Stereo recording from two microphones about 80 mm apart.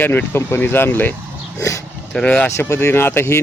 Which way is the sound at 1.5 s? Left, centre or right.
Left.